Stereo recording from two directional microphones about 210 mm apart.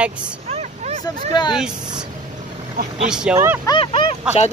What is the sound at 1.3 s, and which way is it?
Speech, 20° left (ahead or behind).